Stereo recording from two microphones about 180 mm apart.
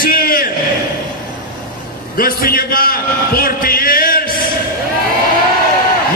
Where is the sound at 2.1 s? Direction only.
55° left (ahead or behind).